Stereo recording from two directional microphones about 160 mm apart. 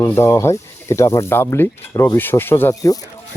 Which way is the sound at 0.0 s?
15° left (ahead or behind).